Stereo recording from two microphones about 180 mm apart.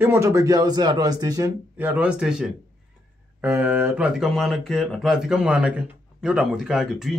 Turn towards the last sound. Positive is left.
turn(degrees=0)  # may be behind; listen again after turning